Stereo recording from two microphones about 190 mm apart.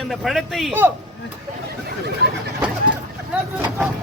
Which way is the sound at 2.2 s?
60° right (ahead or behind).